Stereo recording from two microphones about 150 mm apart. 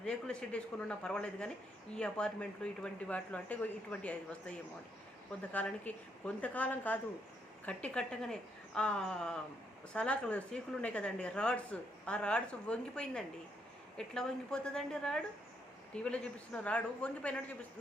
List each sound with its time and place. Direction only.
0.0 s a woman's voice: 5° left (ahead or behind)